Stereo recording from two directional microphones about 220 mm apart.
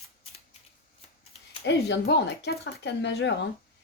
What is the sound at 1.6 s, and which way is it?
A woman's voice, 50° left (ahead or behind).